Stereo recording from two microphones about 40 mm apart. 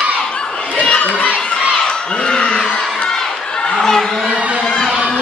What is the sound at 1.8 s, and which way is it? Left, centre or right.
Crowd, left.